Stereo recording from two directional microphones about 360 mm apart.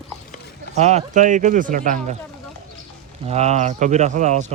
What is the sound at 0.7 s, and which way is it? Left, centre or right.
Speech, centre.